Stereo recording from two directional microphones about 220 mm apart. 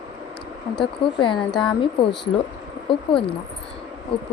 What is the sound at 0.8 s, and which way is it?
Speech, 20° left (ahead or behind).